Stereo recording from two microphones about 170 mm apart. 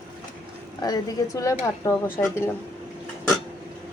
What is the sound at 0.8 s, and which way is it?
Speech, 20° left (ahead or behind).